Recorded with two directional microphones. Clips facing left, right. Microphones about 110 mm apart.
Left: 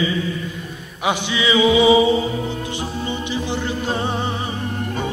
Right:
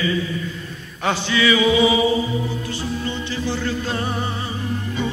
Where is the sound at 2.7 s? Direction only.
15° left (ahead or behind).